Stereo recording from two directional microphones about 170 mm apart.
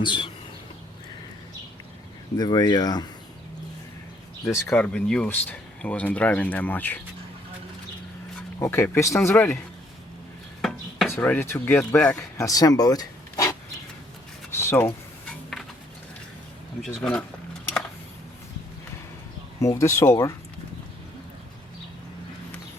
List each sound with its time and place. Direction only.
0.0 s speech: 30° left (ahead or behind)
2.3 s speech: 25° left (ahead or behind)
4.5 s speech: 10° left (ahead or behind)
8.5 s speech: 15° left (ahead or behind)
10.6 s chopping: centre (ahead or behind)
11.1 s speech: 10° left (ahead or behind)
12.5 s speech: 20° left (ahead or behind)
14.5 s a sound: 15° left (ahead or behind)
15.3 s a sound: centre (ahead or behind)
16.8 s speech: 5° left (ahead or behind)
19.6 s speech: 15° left (ahead or behind)